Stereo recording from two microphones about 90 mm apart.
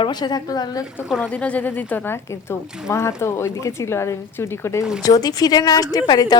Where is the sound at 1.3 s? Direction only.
15° left (ahead or behind).